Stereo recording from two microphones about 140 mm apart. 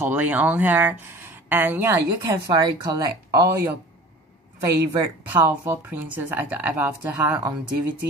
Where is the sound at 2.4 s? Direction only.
30° right (ahead or behind).